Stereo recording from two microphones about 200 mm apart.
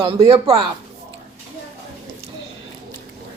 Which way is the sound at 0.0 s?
30° right (ahead or behind).